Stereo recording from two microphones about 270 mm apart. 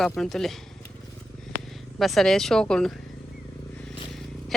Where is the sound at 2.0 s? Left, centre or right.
Centre.